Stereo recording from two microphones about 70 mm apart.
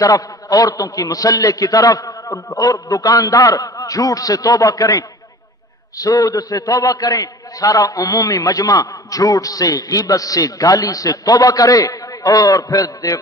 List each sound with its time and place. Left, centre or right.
0.0 s a man's voice: left